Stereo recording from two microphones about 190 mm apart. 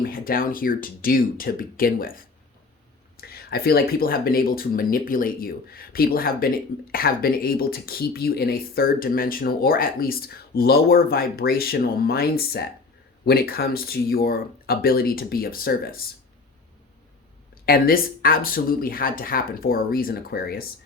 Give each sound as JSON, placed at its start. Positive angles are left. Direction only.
{"t": 0.0, "sound": "speech", "side_deg": 50}
{"t": 17.7, "sound": "speech", "side_deg": 50}